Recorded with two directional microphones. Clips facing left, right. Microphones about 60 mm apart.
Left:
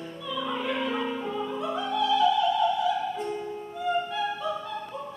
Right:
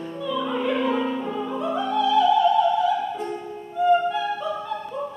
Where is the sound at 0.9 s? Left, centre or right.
Centre.